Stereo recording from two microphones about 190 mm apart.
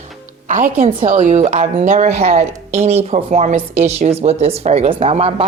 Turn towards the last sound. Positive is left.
turn(degrees=-30)  # may be behind; listen again after turning